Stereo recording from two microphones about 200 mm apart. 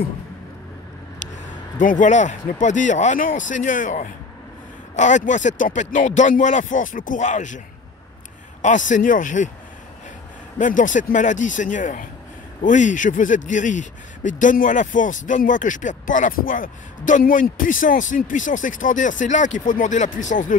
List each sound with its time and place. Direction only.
1.2 s speech: 40° left (ahead or behind)
8.6 s speech: 40° left (ahead or behind)
10.6 s speech: 40° left (ahead or behind)